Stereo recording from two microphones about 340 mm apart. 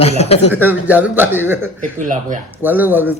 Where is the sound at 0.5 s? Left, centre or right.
Centre.